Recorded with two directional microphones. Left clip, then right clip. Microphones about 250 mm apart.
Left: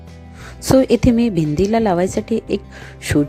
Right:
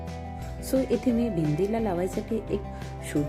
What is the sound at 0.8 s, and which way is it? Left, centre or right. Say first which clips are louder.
Speech: left 10 dB; left.